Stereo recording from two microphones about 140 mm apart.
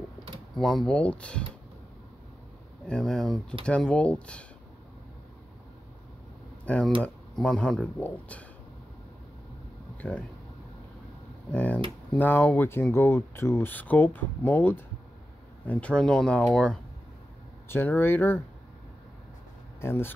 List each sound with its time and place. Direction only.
0.6 s speech: centre (ahead or behind)
2.9 s speech: 5° left (ahead or behind)
6.6 s speech: 10° left (ahead or behind)
10.0 s speech: 10° left (ahead or behind)
11.5 s speech: 10° left (ahead or behind)
17.6 s speech: 15° left (ahead or behind)
19.8 s speech: 15° left (ahead or behind)